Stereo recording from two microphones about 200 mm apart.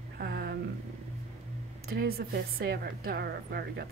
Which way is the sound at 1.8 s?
50° right (ahead or behind).